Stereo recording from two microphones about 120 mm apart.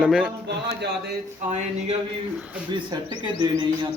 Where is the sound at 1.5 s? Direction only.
75° right (ahead or behind).